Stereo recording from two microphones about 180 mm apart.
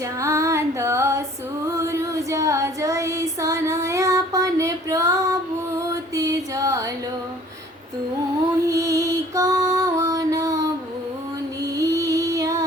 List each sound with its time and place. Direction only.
0.2 s female singing: 15° right (ahead or behind)
1.6 s child singing: 15° right (ahead or behind)
5.9 s music: 20° right (ahead or behind)
8.7 s music: 15° right (ahead or behind)